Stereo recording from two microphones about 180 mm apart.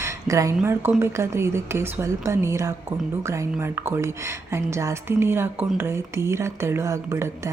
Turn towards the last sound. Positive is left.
turn(degrees=-15)  # may be behind; listen again after turning